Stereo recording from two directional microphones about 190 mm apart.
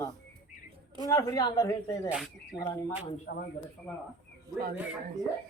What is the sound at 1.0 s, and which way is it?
Speech, 15° left (ahead or behind).